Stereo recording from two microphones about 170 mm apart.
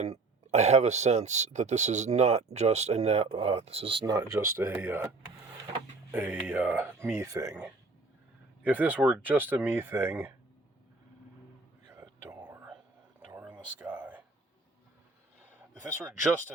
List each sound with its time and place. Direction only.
0.0 s speech: 40° right (ahead or behind); by 5.0 s 15° right (ahead or behind)
6.1 s speech: 10° right (ahead or behind)
8.6 s speech: 10° right (ahead or behind)
11.9 s whispering: 15° right (ahead or behind)
13.4 s a sound: 10° right (ahead or behind)
15.9 s speech: 15° right (ahead or behind)